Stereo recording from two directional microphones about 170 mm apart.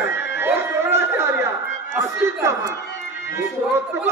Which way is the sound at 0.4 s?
15° right (ahead or behind).